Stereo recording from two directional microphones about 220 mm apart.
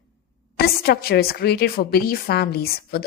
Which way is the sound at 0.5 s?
45° left (ahead or behind).